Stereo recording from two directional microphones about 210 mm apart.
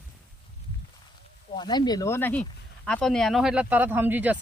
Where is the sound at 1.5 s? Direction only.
20° left (ahead or behind).